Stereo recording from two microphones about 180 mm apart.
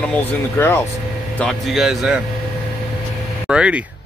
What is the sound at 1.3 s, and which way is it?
Speech, centre (ahead or behind).